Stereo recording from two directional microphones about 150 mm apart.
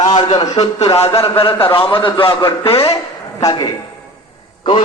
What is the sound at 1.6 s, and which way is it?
A man's voice, 35° left (ahead or behind).